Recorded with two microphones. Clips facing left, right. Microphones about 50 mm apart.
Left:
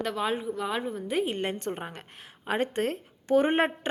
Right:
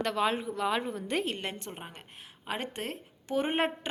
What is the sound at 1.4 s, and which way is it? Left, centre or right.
A woman's voice, left.